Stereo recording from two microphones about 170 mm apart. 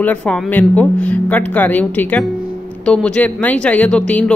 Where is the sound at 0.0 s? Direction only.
5° left (ahead or behind).